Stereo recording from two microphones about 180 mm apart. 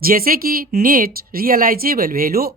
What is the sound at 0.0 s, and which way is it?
Speech, 55° right (ahead or behind).